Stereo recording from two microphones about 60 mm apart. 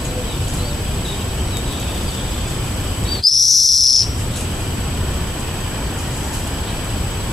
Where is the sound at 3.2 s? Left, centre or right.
Centre.